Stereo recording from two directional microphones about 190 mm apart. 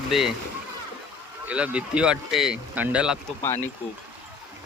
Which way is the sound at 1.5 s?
5° right (ahead or behind).